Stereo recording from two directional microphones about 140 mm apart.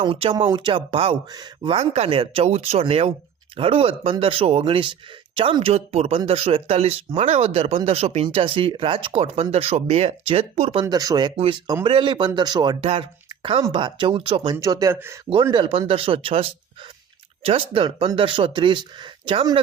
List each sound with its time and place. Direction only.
0.0 s speech: 40° right (ahead or behind)
1.3 s speech: 30° right (ahead or behind)
1.7 s speech: 50° right (ahead or behind)
10.8 s speech: 25° right (ahead or behind)
12.8 s speech: 40° right (ahead or behind)
14.5 s speech: 25° right (ahead or behind)
15.5 s speech: 40° right (ahead or behind)